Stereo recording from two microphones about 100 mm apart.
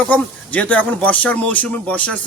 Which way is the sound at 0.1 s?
15° left (ahead or behind).